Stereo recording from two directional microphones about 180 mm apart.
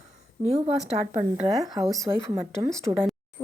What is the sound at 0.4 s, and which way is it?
A woman's voice, 35° right (ahead or behind).